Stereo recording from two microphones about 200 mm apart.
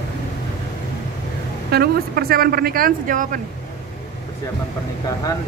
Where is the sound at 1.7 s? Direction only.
50° right (ahead or behind).